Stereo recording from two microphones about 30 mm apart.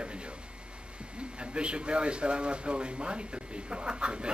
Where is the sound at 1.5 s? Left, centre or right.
Right.